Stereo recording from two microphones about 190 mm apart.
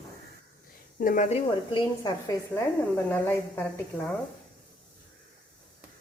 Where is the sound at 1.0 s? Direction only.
45° left (ahead or behind); by 2.6 s 20° left (ahead or behind).